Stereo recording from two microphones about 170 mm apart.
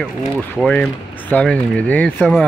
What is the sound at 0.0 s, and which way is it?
Speech, centre (ahead or behind).